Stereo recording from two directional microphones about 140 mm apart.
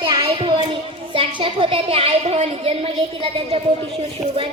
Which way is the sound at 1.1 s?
40° right (ahead or behind).